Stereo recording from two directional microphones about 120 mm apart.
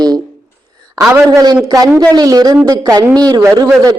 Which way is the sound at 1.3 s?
35° right (ahead or behind).